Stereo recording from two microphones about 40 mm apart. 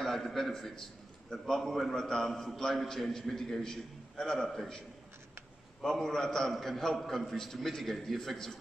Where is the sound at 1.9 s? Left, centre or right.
Centre.